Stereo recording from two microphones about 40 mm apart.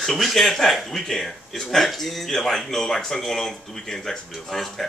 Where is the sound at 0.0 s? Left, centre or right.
Centre.